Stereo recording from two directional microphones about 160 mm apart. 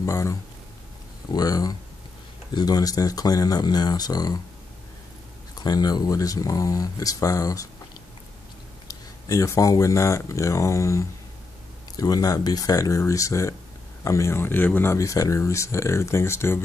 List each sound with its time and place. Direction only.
0.0 s speech: 20° left (ahead or behind)
5.6 s speech: 25° left (ahead or behind)
8.8 s speech: 20° left (ahead or behind)